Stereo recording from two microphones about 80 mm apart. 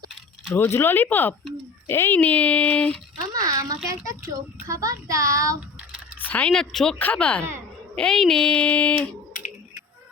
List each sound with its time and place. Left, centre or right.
0.5 s speech: left
3.3 s a child's voice: right
6.2 s a sound: left
6.7 s speech: centre
7.0 s speech: centre